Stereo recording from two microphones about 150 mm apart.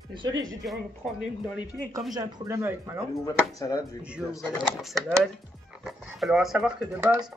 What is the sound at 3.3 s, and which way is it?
Speech, 25° left (ahead or behind).